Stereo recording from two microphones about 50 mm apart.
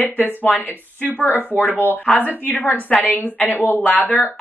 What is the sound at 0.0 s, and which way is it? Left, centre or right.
Speech, left.